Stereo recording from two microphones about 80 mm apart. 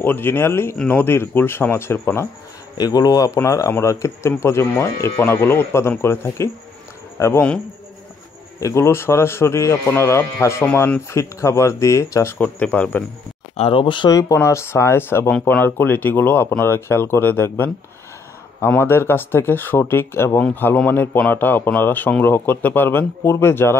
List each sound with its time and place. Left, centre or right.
0.0 s a man's voice: left
0.7 s a man's voice: left
2.8 s a man's voice: left
8.5 s speech: left
10.6 s a man's voice: left
11.1 s speech: left
12.4 s speech: centre
13.7 s speech: left
14.1 s a man's voice: left